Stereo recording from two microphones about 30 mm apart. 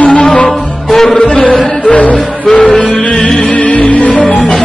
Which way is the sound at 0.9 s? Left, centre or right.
Centre.